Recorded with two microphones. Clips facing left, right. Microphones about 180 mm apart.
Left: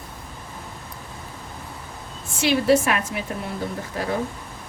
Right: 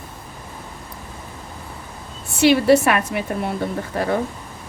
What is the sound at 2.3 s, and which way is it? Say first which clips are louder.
A woman's voice: right 5 dB; 65° right (ahead or behind).